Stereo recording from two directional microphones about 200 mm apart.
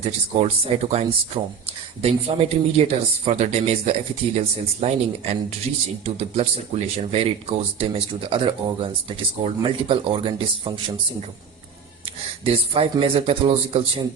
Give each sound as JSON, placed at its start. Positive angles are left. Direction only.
{"t": 0.0, "sound": "speech", "side_deg": -30}
{"t": 12.5, "sound": "speech", "side_deg": -30}